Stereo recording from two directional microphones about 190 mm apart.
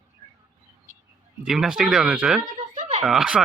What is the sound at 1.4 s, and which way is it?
Speech, 5° right (ahead or behind).